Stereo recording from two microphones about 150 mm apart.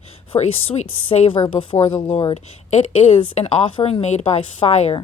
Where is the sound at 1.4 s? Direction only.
30° left (ahead or behind).